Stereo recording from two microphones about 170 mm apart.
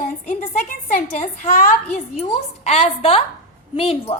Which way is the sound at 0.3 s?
45° left (ahead or behind).